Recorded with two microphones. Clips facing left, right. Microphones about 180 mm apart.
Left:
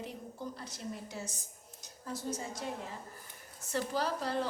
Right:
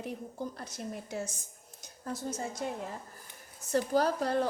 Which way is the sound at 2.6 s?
55° right (ahead or behind).